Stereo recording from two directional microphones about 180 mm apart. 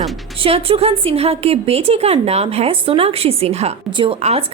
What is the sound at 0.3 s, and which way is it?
A woman's voice, 30° right (ahead or behind).